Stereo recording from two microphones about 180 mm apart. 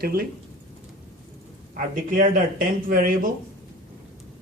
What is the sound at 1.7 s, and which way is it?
Speech, 50° right (ahead or behind).